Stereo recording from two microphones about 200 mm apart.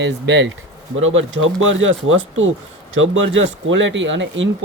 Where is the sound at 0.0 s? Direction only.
65° right (ahead or behind).